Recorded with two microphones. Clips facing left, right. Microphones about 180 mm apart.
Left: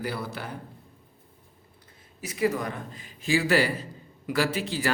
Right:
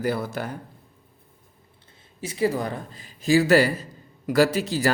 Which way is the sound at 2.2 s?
30° right (ahead or behind).